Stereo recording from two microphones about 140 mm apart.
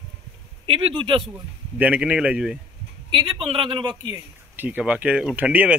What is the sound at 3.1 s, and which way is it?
A man's voice, 35° right (ahead or behind).